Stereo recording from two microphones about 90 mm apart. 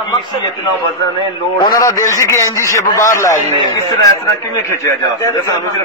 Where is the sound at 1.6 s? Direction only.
45° left (ahead or behind).